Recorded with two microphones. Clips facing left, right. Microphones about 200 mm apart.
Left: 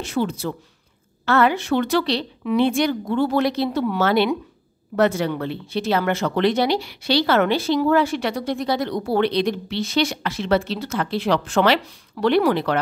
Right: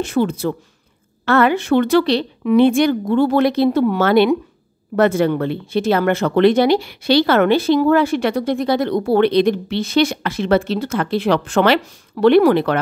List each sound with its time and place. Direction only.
0.0 s speech: 55° right (ahead or behind)